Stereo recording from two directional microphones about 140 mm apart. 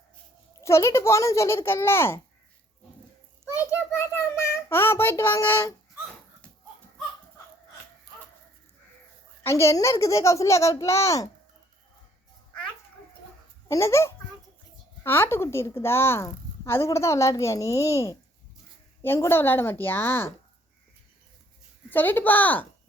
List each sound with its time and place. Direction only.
0.6 s a woman's voice: 20° left (ahead or behind)
3.4 s a sound: 20° left (ahead or behind)
4.4 s speech: 15° left (ahead or behind)
9.4 s a woman's voice: 20° left (ahead or behind)
13.7 s a woman's voice: 20° left (ahead or behind)
21.8 s a woman's voice: 15° left (ahead or behind)